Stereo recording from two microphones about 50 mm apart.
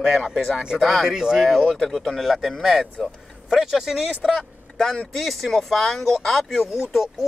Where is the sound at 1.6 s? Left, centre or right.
Centre.